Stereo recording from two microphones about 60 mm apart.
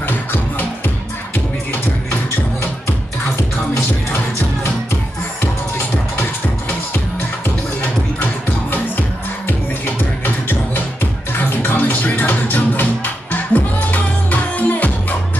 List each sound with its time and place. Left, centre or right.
0.0 s music: left
6.9 s music: left